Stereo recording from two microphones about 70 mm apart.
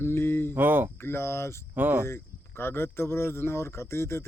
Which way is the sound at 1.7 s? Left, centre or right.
Right.